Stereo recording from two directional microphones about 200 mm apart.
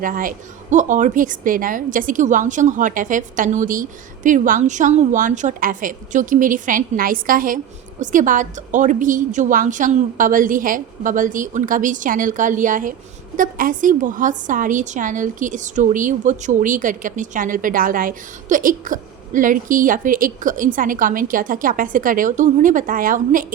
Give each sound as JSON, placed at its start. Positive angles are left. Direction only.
{"t": 0.0, "sound": "a woman's voice", "side_deg": -45}